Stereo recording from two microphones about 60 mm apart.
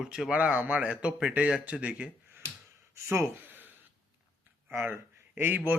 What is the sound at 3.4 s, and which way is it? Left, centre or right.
Gasp, right.